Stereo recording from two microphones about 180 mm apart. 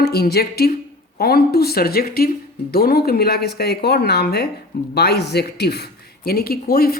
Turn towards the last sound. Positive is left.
turn(degrees=55)  # may be behind; listen again after turning